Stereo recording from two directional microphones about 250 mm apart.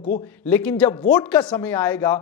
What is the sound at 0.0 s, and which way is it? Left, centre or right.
Speech, left.